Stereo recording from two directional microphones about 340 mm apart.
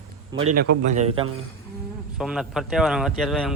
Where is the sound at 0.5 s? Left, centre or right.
Right.